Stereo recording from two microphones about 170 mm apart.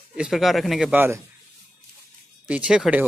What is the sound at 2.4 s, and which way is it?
Speech, 5° right (ahead or behind).